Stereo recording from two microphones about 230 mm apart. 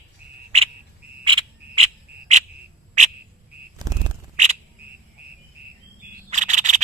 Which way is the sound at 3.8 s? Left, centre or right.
Centre.